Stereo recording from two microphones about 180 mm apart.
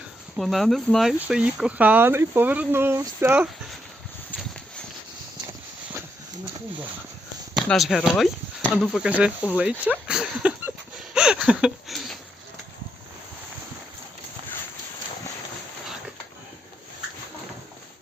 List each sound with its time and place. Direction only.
0.3 s speech: centre (ahead or behind)
7.5 s speech: centre (ahead or behind)
10.1 s a sound: 5° right (ahead or behind)